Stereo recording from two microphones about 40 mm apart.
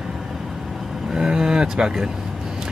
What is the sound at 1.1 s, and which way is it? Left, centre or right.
Speech, centre.